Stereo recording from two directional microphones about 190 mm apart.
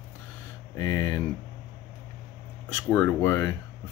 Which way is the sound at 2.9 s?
10° left (ahead or behind).